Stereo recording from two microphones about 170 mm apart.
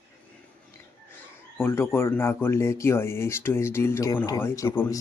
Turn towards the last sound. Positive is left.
turn(degrees=15)  # may be behind; listen again after turning